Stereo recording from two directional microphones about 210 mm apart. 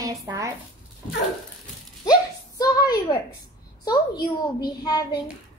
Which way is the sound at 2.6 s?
20° left (ahead or behind).